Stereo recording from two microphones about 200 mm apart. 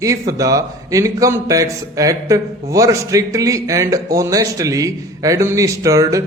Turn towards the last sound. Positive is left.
turn(degrees=-15)  # may be behind; listen again after turning